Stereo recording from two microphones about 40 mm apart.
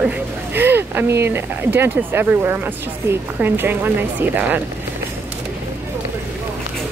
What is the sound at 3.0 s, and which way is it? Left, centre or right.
Speech, right.